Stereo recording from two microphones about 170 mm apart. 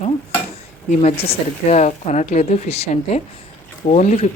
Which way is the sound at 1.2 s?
40° left (ahead or behind).